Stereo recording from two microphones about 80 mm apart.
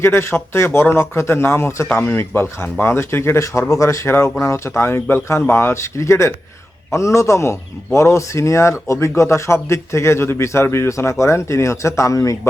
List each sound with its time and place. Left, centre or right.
0.0 s speech: left